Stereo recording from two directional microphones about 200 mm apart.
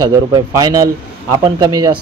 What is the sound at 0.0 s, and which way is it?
Speech, 20° right (ahead or behind).